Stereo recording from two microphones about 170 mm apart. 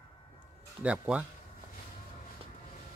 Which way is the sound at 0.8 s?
5° right (ahead or behind).